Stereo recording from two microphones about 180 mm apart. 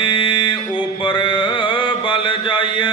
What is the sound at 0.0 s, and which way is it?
Mantra, 25° left (ahead or behind).